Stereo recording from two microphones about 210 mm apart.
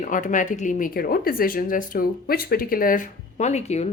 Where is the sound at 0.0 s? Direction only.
35° left (ahead or behind).